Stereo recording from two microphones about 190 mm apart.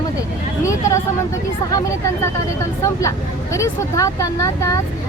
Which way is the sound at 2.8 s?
15° left (ahead or behind).